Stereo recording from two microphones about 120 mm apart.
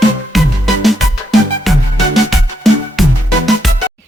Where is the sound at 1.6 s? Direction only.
Centre (ahead or behind).